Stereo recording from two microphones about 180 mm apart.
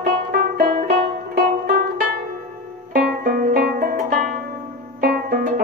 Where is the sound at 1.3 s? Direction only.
50° right (ahead or behind).